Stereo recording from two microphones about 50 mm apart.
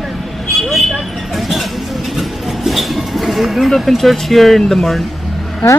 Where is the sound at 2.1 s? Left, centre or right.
Centre.